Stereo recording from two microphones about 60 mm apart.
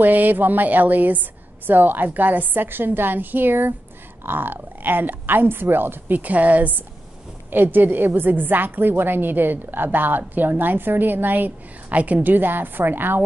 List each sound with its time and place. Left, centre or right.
0.0 s a woman's voice: right